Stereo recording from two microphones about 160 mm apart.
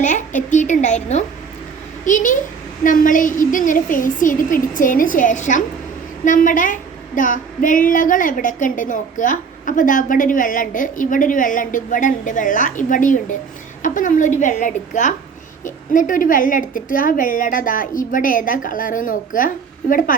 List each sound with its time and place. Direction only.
0.0 s a woman's voice: 50° left (ahead or behind)